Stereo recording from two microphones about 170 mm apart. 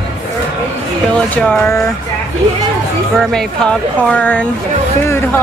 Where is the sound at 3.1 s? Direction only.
Centre (ahead or behind).